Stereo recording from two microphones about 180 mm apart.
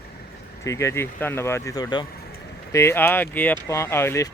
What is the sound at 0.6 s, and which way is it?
Speech, 15° left (ahead or behind).